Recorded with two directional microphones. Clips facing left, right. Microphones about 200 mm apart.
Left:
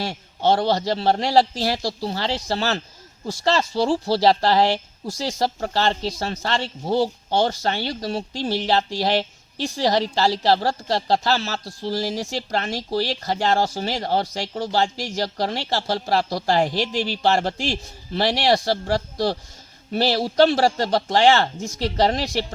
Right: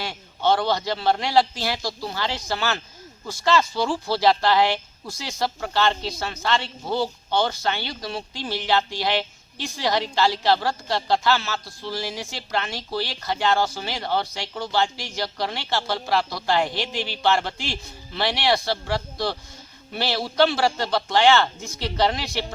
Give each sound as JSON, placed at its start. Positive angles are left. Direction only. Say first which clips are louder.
{"t": 0.0, "sound": "speech", "louder": "left 2 dB", "side_deg": 35}